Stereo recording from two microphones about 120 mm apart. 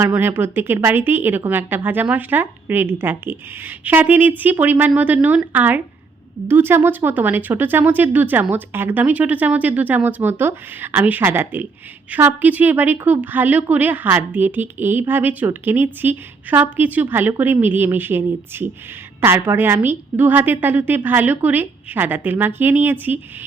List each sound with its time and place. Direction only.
0.1 s speech: 15° right (ahead or behind)